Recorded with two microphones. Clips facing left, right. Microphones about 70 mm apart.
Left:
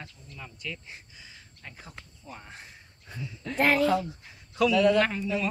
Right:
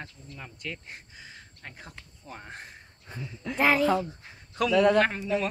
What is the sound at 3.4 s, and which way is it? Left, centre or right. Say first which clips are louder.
Speech: even; centre.